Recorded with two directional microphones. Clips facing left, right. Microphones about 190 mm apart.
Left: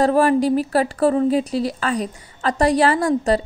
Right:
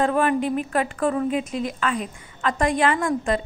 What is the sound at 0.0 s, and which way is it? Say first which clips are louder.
A woman's voice: left 5 dB; 35° left (ahead or behind).